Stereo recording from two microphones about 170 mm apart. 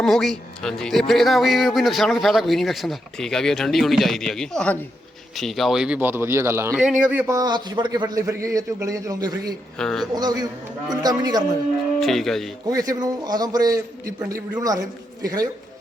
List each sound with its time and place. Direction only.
0.0 s a man's voice: centre (ahead or behind); by 6.7 s 15° right (ahead or behind)
6.7 s a man's voice: 5° right (ahead or behind); by 9.6 s 20° right (ahead or behind)
9.7 s a man's voice: 5° left (ahead or behind)
10.2 s a man's voice: 25° right (ahead or behind)
11.9 s a man's voice: centre (ahead or behind)
12.6 s a man's voice: 20° right (ahead or behind)